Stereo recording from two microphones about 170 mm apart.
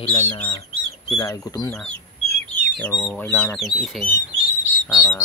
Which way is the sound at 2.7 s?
5° left (ahead or behind).